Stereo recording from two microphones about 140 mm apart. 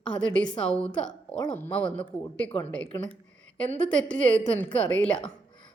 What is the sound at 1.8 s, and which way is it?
Speech, 35° left (ahead or behind).